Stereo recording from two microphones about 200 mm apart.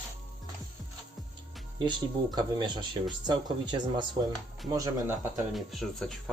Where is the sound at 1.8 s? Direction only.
20° right (ahead or behind).